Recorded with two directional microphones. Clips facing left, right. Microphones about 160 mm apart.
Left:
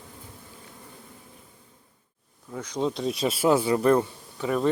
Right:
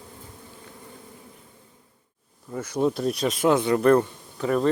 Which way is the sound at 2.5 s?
5° right (ahead or behind).